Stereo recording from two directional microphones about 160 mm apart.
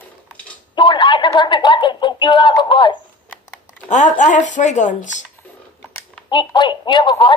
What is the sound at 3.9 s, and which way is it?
Speech, 50° left (ahead or behind).